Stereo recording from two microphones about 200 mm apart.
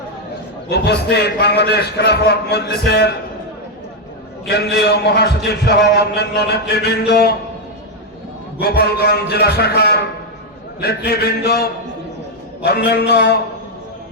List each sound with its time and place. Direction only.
0.7 s a man's voice: 55° left (ahead or behind)
4.4 s a man's voice: 55° left (ahead or behind)
8.5 s a man's voice: 50° left (ahead or behind)